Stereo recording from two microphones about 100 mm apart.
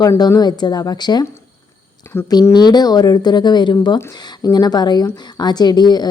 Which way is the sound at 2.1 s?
25° left (ahead or behind).